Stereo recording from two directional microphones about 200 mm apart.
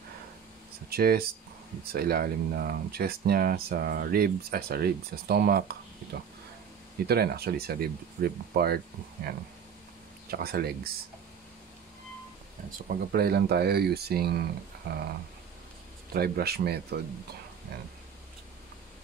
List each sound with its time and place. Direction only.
0.8 s speech: 50° right (ahead or behind)
7.1 s speech: 50° right (ahead or behind)
12.7 s speech: 50° right (ahead or behind)
14.8 s a sound: 55° right (ahead or behind)
16.1 s speech: 50° right (ahead or behind)